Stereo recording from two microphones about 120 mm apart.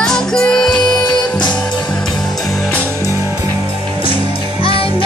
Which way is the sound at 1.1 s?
35° left (ahead or behind).